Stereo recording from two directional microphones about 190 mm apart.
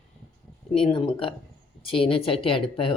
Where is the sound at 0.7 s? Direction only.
30° left (ahead or behind).